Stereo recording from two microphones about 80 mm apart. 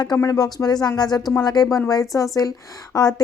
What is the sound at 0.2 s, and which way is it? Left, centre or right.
A woman's voice, left.